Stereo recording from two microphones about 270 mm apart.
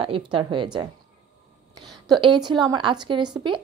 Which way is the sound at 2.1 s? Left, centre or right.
Centre.